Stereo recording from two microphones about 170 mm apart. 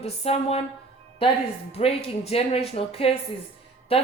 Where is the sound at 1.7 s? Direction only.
35° left (ahead or behind).